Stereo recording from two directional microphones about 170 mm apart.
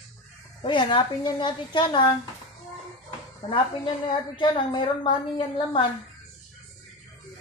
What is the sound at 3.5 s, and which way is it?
A woman's voice, 30° left (ahead or behind).